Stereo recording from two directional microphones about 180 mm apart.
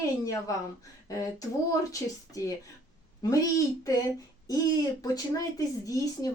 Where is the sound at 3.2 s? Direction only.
20° left (ahead or behind).